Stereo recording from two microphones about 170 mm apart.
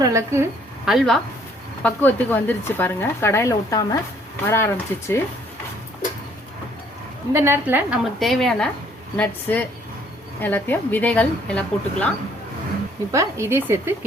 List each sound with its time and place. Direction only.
0.0 s speech: 15° right (ahead or behind)
0.9 s a woman's voice: centre (ahead or behind)
1.8 s a woman's voice: 10° left (ahead or behind)
7.3 s speech: 15° right (ahead or behind)
8.0 s a woman's voice: centre (ahead or behind)
13.1 s speech: 15° right (ahead or behind)